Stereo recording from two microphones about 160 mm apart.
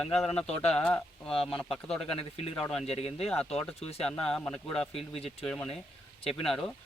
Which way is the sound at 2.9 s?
40° left (ahead or behind).